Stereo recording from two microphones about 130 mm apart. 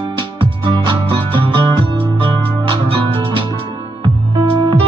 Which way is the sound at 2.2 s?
40° right (ahead or behind).